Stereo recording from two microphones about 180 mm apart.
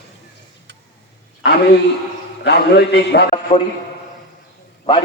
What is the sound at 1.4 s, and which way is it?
A man's voice, 65° left (ahead or behind).